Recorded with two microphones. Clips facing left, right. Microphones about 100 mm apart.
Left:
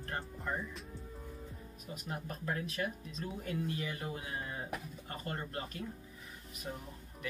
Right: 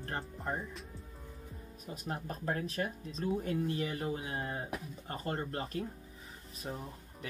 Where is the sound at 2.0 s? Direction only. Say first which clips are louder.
Right 3 dB; 35° right (ahead or behind).